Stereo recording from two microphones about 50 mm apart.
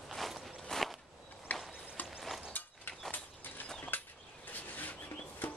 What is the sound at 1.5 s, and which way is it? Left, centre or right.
Clip-clop, left.